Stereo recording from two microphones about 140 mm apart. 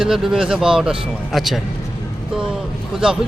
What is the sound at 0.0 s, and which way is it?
A man's voice, 5° right (ahead or behind).